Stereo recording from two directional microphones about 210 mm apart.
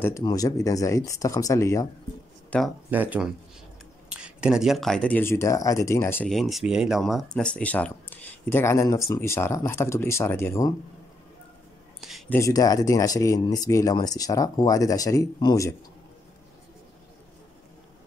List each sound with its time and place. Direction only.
0.0 s speech: 15° left (ahead or behind)
2.9 s speech: 10° right (ahead or behind); by 10.7 s 10° left (ahead or behind)
12.0 s a sound: centre (ahead or behind)
12.4 s speech: 15° left (ahead or behind)